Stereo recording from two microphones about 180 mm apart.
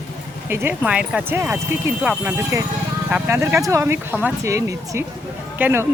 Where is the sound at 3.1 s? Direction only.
10° right (ahead or behind).